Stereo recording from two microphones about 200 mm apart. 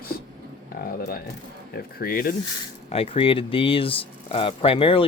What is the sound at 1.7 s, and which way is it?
Speech, 50° left (ahead or behind).